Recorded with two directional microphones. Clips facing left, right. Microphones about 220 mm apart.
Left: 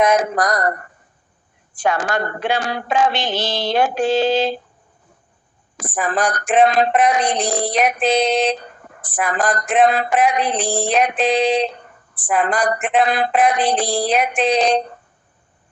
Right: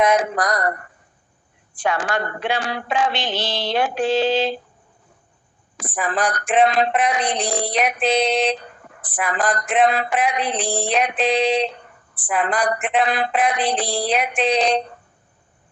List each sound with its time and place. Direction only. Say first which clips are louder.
0.0 s speech: left 2 dB; 45° left (ahead or behind)
1.7 s speech: left 2 dB; 45° left (ahead or behind)
5.7 s speech: left 3 dB; 45° left (ahead or behind)